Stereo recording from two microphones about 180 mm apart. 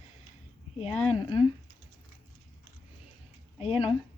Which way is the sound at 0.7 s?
30° left (ahead or behind).